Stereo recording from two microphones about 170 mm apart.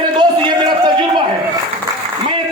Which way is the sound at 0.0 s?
25° right (ahead or behind).